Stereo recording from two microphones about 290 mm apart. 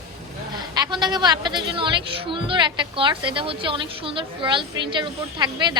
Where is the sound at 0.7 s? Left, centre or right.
Centre.